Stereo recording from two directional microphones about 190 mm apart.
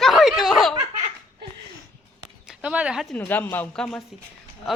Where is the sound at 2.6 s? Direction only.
5° right (ahead or behind).